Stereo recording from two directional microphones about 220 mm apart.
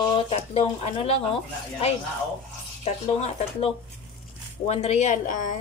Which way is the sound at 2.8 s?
30° left (ahead or behind).